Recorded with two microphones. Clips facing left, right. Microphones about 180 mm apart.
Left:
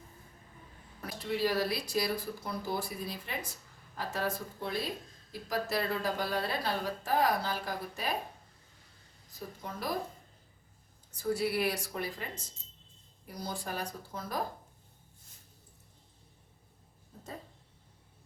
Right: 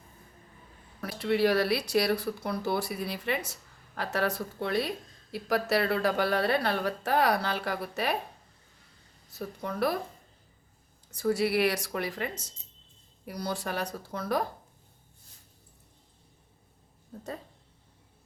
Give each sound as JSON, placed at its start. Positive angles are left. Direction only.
{"t": 1.0, "sound": "speech", "side_deg": -70}
{"t": 9.6, "sound": "speech", "side_deg": -65}
{"t": 11.1, "sound": "speech", "side_deg": -80}